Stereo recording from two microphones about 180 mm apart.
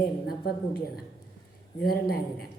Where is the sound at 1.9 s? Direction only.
55° left (ahead or behind).